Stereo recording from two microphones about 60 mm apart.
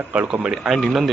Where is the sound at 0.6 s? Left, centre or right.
Centre.